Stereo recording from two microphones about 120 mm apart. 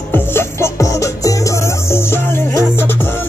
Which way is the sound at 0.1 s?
20° left (ahead or behind).